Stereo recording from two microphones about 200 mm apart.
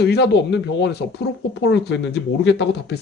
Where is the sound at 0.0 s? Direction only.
55° left (ahead or behind).